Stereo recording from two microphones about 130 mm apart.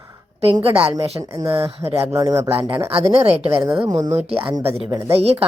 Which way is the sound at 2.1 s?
20° right (ahead or behind).